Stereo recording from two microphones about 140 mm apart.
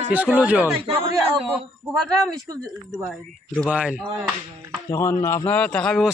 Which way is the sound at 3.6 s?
10° right (ahead or behind).